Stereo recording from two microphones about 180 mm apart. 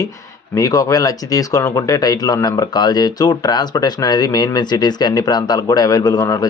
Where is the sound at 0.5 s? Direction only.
20° left (ahead or behind).